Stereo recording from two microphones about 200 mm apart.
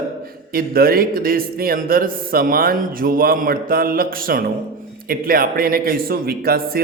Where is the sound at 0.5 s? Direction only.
50° right (ahead or behind).